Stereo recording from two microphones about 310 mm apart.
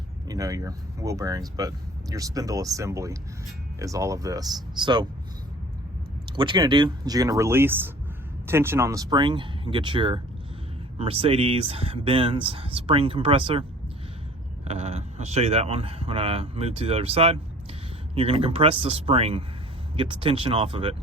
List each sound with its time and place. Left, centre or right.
0.3 s speech: centre
6.3 s speech: centre